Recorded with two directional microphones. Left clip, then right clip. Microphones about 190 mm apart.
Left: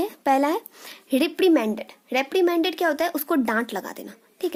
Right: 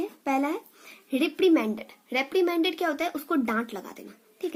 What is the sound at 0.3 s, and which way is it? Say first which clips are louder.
Speech: left 7 dB; 45° left (ahead or behind).